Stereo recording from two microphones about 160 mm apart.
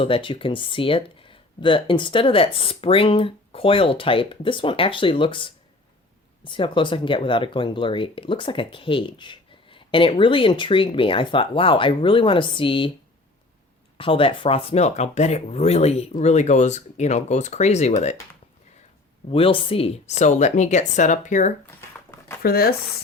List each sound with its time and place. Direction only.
0.0 s speech: 35° left (ahead or behind)
14.0 s speech: 35° left (ahead or behind)
19.3 s speech: 35° left (ahead or behind); by 21.5 s 50° left (ahead or behind)
22.4 s speech: 70° left (ahead or behind)